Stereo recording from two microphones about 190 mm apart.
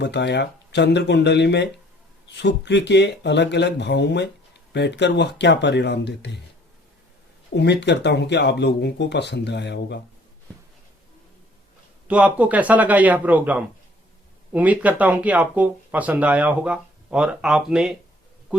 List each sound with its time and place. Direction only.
0.0 s speech: 65° left (ahead or behind)
7.5 s speech: 65° left (ahead or behind)
12.0 s speech: 5° right (ahead or behind)